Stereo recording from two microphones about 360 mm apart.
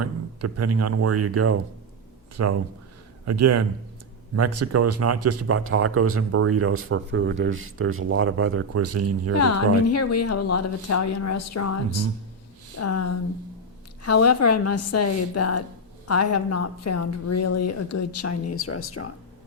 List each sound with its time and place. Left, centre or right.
0.0 s a man's voice: right
9.9 s speech: left